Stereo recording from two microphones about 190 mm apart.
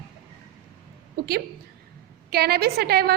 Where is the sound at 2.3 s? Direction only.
55° right (ahead or behind).